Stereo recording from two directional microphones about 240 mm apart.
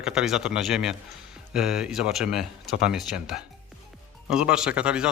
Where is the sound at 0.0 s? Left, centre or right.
Centre.